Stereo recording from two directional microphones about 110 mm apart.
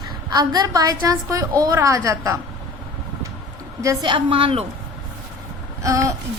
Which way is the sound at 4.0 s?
50° right (ahead or behind).